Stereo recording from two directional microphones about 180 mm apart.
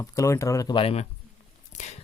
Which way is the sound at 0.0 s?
15° left (ahead or behind).